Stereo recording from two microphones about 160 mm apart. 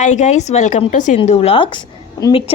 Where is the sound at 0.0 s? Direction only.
50° left (ahead or behind).